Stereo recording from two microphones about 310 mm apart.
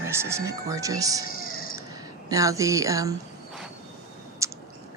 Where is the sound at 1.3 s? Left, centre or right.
Left.